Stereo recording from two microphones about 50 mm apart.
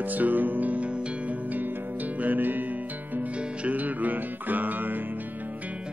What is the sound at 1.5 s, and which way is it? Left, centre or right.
Music, right.